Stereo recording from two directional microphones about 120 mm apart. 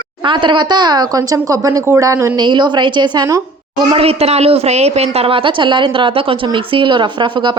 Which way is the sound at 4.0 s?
55° right (ahead or behind).